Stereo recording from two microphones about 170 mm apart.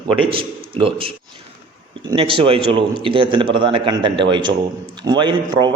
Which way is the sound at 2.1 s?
30° right (ahead or behind).